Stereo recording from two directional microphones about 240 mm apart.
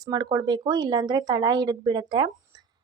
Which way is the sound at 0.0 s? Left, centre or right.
Centre.